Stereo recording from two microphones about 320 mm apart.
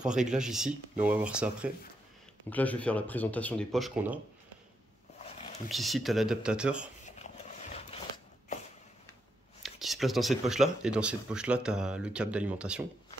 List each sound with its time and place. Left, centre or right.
0.0 s speech: centre
5.7 s speech: centre
7.1 s a sound: left
9.6 s speech: centre